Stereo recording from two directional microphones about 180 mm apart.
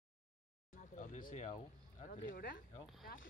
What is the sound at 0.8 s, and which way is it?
Speech, 45° left (ahead or behind).